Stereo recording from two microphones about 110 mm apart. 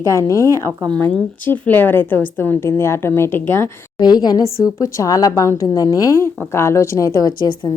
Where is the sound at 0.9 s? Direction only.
15° left (ahead or behind).